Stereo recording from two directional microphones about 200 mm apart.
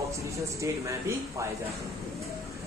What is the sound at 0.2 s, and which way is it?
Speech, 15° right (ahead or behind).